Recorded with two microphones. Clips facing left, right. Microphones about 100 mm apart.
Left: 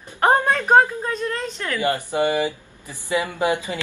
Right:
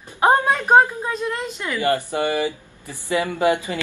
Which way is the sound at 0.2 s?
10° right (ahead or behind).